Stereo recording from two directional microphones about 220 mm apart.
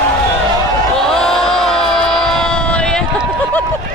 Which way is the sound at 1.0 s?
5° left (ahead or behind).